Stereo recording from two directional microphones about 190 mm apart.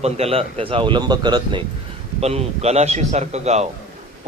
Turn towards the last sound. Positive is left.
turn(degrees=-35)  # may be behind; listen again after turning